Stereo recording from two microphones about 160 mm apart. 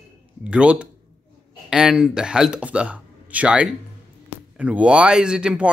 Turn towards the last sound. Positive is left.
turn(degrees=-5)  # may be behind; listen again after turning